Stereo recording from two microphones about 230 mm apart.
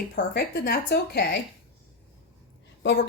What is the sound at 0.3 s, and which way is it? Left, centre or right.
Speech, left.